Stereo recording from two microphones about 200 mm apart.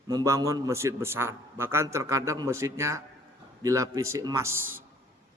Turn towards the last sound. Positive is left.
turn(degrees=-10)  # may be behind; listen again after turning